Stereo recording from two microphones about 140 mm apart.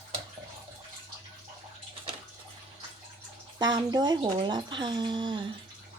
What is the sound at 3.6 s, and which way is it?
Speech, 30° right (ahead or behind).